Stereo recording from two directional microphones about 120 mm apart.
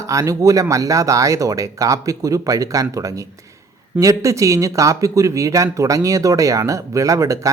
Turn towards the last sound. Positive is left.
turn(degrees=-25)  # may be behind; listen again after turning